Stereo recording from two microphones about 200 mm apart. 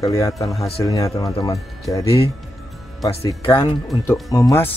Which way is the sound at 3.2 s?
20° left (ahead or behind).